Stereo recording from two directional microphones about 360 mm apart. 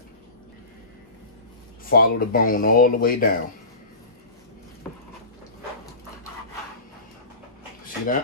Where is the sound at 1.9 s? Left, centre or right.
Left.